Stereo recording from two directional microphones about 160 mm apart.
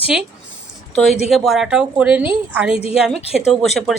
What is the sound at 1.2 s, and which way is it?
Speech, centre (ahead or behind).